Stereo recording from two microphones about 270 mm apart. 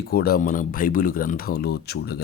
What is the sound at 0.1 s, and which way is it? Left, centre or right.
Speech, left.